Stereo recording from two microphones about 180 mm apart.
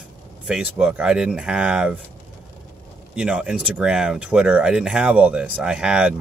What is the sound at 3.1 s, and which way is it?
Speech, 5° right (ahead or behind).